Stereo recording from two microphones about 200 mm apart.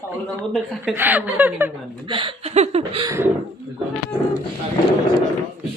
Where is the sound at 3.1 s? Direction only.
10° right (ahead or behind).